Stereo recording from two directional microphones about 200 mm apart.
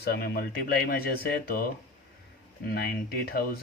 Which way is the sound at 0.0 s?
50° left (ahead or behind).